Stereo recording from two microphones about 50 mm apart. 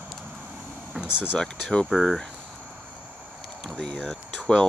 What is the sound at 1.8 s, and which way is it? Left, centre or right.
Speech, centre.